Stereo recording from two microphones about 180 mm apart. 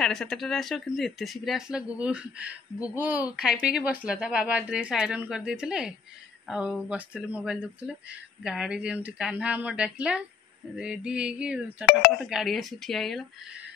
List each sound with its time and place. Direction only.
0.0 s a woman's voice: 5° left (ahead or behind)